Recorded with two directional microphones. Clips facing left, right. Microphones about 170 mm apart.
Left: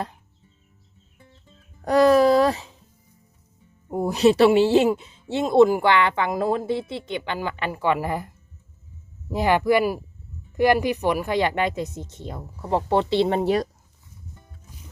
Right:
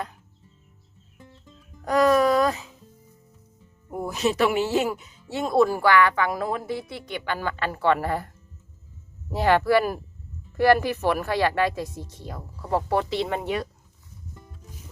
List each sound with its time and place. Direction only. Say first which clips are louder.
1.8 s speech: left 3 dB; 35° left (ahead or behind)
3.8 s speech: left 7 dB; 30° left (ahead or behind); by 8.3 s 15° left (ahead or behind)
9.3 s speech: even; 15° left (ahead or behind); by 13.7 s 35° left (ahead or behind)